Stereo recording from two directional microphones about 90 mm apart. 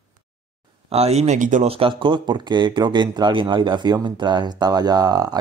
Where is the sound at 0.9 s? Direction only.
90° right.